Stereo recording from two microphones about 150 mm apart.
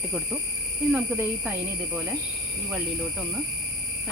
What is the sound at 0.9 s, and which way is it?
Speech, 15° right (ahead or behind).